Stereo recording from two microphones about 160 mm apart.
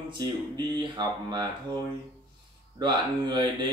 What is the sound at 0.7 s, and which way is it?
Speech, 25° right (ahead or behind).